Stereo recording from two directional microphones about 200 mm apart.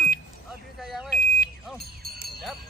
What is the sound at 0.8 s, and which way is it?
Speech, centre (ahead or behind).